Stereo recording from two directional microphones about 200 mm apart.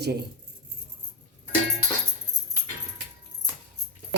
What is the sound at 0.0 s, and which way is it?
Speech, 55° right (ahead or behind).